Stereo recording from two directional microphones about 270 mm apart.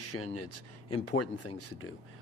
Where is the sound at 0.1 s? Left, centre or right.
Left.